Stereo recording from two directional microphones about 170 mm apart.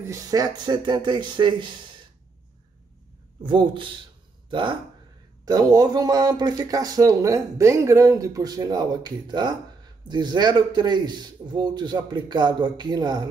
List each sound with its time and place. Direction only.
0.0 s speech: 20° right (ahead or behind)
3.4 s speech: 30° right (ahead or behind)